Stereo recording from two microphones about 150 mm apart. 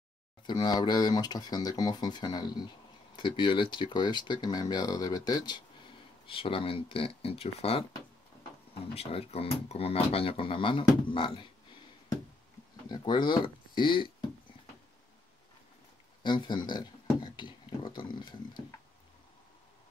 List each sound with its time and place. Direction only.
0.5 s speech: 30° left (ahead or behind)
12.8 s speech: 30° left (ahead or behind)
16.2 s speech: 30° left (ahead or behind)